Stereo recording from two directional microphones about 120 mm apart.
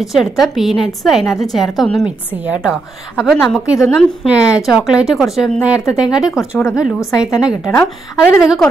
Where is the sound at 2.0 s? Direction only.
10° right (ahead or behind).